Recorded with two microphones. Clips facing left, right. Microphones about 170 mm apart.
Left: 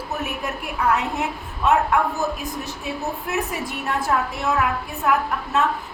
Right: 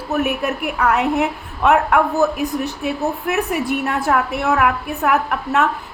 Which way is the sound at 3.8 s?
65° right (ahead or behind).